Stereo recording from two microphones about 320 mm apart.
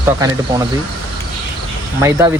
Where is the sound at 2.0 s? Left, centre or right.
Centre.